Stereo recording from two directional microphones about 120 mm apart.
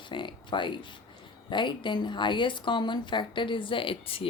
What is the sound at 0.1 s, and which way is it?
Speech, 40° left (ahead or behind).